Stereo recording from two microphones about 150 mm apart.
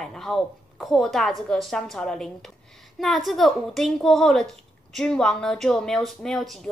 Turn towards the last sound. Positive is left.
turn(degrees=0)  # may be behind; listen again after turning